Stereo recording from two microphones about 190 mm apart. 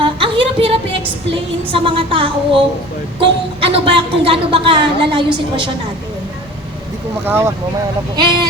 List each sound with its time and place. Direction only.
0.0 s music: 25° right (ahead or behind)
1.3 s a woman's voice: 30° right (ahead or behind)
7.3 s speech: 10° right (ahead or behind)
8.1 s a woman's voice: 25° right (ahead or behind)